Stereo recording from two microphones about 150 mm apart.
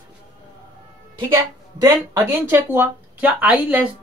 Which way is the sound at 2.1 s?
15° right (ahead or behind).